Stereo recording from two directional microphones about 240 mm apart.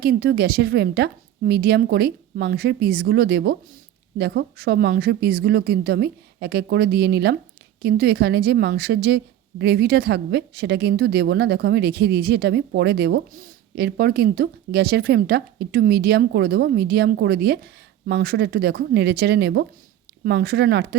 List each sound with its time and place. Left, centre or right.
0.0 s a woman's voice: right